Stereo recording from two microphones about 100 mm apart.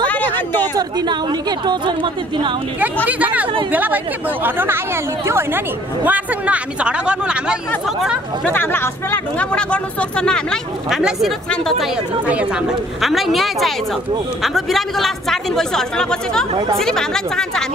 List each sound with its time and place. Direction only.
0.7 s speech: 45° right (ahead or behind)
3.1 s speech: 15° right (ahead or behind)
6.0 s speech: 15° right (ahead or behind)
8.5 s speech: 20° left (ahead or behind)
10.9 s speech: 5° right (ahead or behind)
12.3 s speech: 15° right (ahead or behind)
13.0 s speech: centre (ahead or behind)